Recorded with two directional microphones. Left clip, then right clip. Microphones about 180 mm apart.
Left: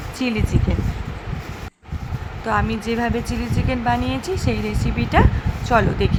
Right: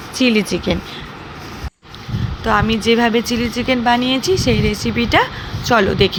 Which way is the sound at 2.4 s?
15° right (ahead or behind).